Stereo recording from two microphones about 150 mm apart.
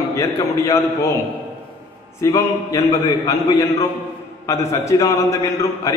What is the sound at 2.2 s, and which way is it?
A man's voice, 20° left (ahead or behind).